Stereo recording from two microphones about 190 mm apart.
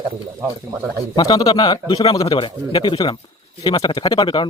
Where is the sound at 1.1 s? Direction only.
20° left (ahead or behind).